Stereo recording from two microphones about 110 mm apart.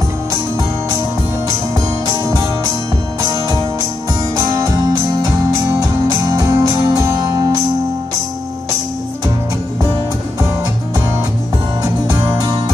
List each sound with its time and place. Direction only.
2.2 s music: 35° right (ahead or behind)
5.8 s music: 35° right (ahead or behind)
11.8 s music: 35° right (ahead or behind)